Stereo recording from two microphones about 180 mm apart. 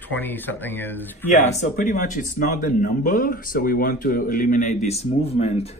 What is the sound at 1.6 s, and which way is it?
Speech, 45° left (ahead or behind).